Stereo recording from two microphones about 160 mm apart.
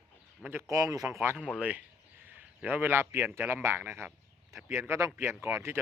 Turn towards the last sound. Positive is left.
turn(degrees=-15)  # may be behind; listen again after turning